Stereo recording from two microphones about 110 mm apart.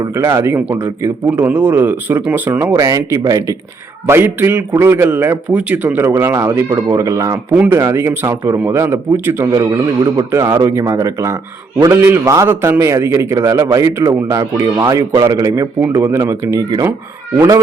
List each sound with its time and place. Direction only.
0.1 s a man's voice: 25° right (ahead or behind)
2.7 s speech: 30° right (ahead or behind)
4.0 s a man's voice: 20° right (ahead or behind)
6.7 s a man's voice: 35° right (ahead or behind)
7.5 s a man's voice: 15° right (ahead or behind)
9.6 s a man's voice: 30° right (ahead or behind)
14.6 s a man's voice: 35° right (ahead or behind)